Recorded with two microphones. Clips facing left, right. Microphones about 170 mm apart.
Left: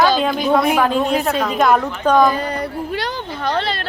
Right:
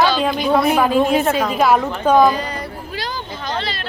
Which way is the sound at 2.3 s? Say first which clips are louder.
Left 3 dB; 60° left (ahead or behind).